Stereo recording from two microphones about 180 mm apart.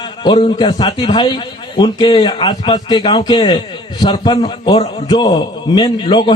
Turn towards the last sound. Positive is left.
turn(degrees=25)  # may be behind; listen again after turning